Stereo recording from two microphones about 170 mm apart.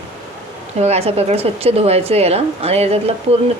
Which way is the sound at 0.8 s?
40° right (ahead or behind).